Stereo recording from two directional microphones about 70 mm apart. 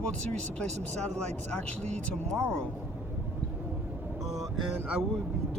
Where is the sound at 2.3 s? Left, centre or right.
Centre.